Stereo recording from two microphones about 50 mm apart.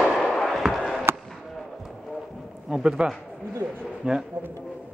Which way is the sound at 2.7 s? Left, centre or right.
Centre.